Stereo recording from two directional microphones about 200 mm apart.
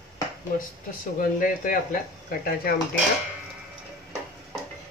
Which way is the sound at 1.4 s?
40° left (ahead or behind).